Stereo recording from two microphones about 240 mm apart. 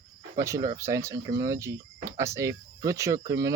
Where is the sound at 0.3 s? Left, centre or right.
Centre.